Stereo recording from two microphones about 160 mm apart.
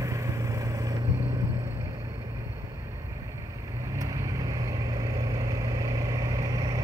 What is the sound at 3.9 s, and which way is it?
Vehicle, 20° right (ahead or behind).